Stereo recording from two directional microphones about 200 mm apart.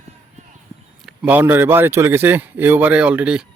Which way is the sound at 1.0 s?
5° right (ahead or behind).